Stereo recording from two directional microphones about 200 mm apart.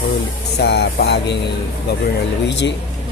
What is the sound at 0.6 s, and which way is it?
Speech, 55° left (ahead or behind).